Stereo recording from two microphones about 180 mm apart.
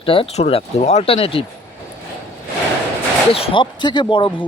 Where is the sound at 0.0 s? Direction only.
30° left (ahead or behind).